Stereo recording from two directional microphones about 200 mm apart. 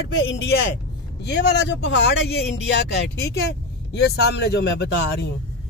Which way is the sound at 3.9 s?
60° left (ahead or behind).